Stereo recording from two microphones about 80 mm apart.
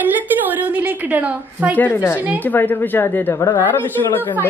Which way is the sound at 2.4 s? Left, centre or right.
Left.